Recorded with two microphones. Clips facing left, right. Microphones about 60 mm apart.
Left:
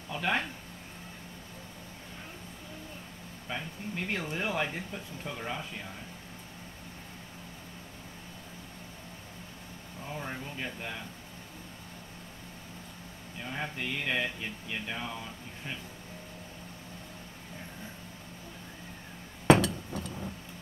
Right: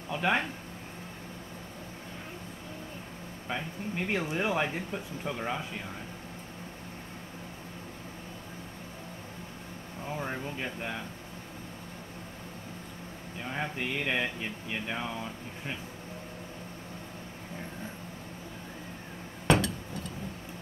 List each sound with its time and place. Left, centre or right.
0.1 s a sound: centre
3.4 s speech: centre
10.0 s speech: centre
13.4 s speech: centre